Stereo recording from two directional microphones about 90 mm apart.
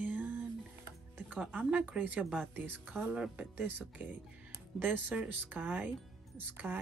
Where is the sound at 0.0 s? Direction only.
15° right (ahead or behind).